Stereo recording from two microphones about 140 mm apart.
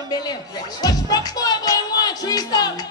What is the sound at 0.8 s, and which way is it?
Speech, 30° left (ahead or behind).